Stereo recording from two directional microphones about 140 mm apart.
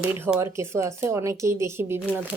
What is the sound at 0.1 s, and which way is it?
A woman's voice, 15° right (ahead or behind).